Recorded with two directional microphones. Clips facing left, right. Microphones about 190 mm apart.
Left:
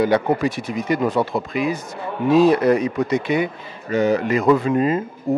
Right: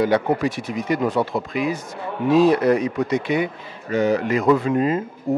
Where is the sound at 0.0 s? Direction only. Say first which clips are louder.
Left 1 dB; 15° left (ahead or behind).